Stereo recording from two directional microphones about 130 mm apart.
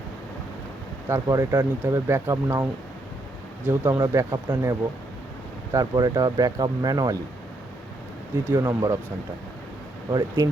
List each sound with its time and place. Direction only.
1.0 s speech: 25° right (ahead or behind)
3.7 s speech: 15° right (ahead or behind)
8.4 s speech: 20° right (ahead or behind)
10.1 s speech: 30° right (ahead or behind)